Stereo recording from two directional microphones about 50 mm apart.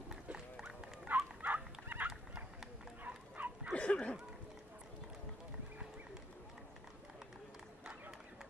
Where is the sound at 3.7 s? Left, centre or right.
Left.